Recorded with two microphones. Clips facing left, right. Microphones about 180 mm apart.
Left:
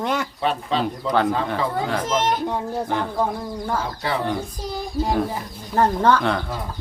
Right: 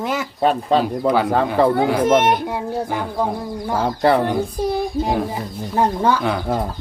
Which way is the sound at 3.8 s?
60° right (ahead or behind).